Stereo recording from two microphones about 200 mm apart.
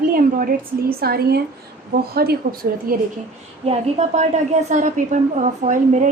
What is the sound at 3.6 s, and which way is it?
A woman's voice, 35° right (ahead or behind).